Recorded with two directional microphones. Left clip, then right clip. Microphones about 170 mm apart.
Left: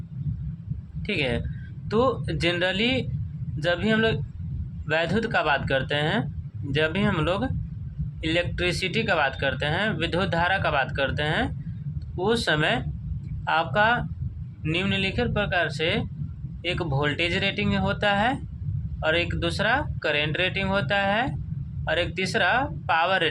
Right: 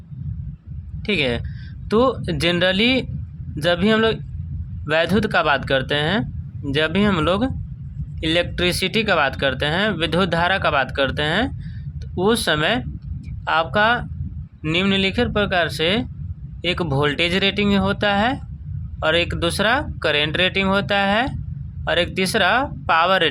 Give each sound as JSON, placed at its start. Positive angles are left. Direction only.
{"t": 1.0, "sound": "speech", "side_deg": -30}